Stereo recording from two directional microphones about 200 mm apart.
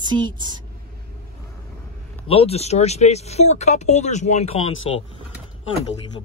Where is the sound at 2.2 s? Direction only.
30° left (ahead or behind).